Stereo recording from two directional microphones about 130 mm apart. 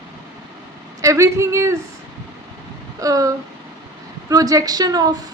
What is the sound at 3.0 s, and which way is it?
A woman's voice, 25° right (ahead or behind).